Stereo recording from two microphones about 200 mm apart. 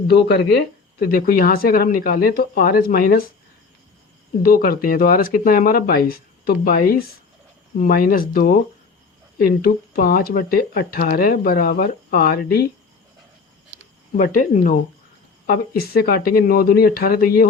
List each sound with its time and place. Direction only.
0.1 s speech: 55° left (ahead or behind)
4.4 s speech: 45° left (ahead or behind)
14.2 s speech: 40° left (ahead or behind)
15.4 s speech: 50° left (ahead or behind)